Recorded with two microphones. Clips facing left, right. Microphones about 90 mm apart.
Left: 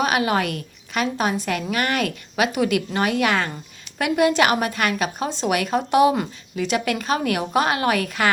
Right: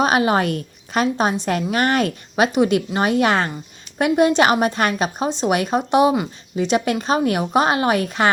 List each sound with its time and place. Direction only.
0.0 s a woman's voice: 30° right (ahead or behind)